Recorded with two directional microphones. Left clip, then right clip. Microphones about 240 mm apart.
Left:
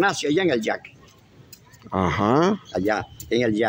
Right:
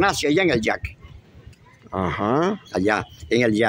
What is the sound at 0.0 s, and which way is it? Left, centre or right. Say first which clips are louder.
Speech: right 2 dB; right.